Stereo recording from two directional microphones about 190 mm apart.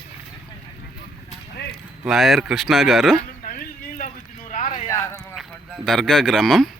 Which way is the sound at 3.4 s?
50° left (ahead or behind).